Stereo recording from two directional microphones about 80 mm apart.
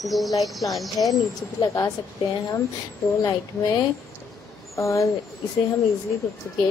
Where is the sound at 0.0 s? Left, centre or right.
Centre.